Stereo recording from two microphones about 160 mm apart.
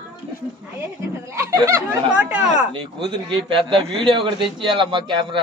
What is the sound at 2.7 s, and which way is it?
A man's voice, 30° right (ahead or behind).